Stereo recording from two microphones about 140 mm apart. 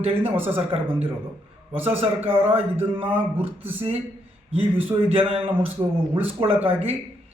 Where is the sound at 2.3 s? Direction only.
45° right (ahead or behind).